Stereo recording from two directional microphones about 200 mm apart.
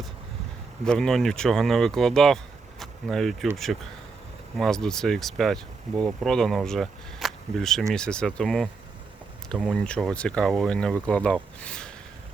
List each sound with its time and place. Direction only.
0.9 s speech: centre (ahead or behind)
4.5 s speech: centre (ahead or behind)